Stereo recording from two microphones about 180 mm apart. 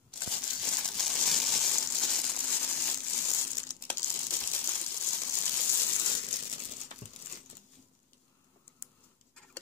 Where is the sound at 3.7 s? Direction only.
10° left (ahead or behind).